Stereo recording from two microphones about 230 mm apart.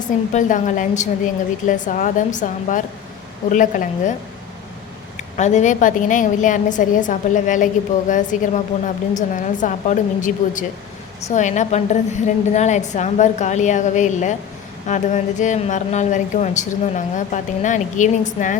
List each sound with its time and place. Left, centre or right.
0.0 s a woman's voice: left
5.1 s a woman's voice: left